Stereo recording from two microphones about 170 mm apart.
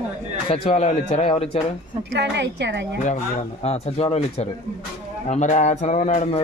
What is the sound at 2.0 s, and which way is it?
Speech, 90° right.